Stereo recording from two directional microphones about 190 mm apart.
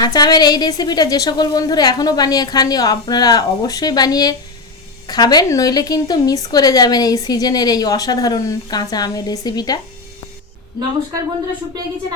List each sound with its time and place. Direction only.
0.0 s a woman's voice: 20° left (ahead or behind)